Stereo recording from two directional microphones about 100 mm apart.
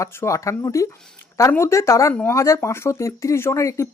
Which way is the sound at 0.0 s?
30° left (ahead or behind).